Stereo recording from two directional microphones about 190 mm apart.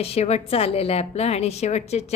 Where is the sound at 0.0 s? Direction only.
35° left (ahead or behind).